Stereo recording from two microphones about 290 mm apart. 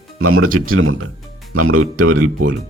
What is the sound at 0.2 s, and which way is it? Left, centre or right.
A man's voice, right.